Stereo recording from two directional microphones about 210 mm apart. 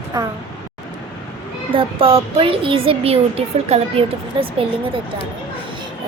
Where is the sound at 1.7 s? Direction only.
25° right (ahead or behind).